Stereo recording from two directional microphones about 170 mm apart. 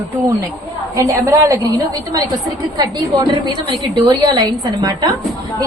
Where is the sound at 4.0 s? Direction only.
25° right (ahead or behind).